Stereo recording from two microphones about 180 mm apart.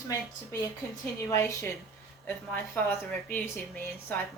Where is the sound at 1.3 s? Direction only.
15° left (ahead or behind).